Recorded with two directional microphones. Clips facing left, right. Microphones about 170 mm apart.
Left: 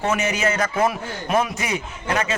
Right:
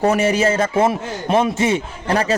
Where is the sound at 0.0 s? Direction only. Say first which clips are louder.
Right 6 dB; 35° right (ahead or behind).